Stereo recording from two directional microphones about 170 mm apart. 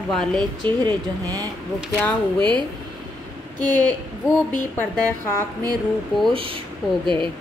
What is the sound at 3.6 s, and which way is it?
Speech, 10° left (ahead or behind).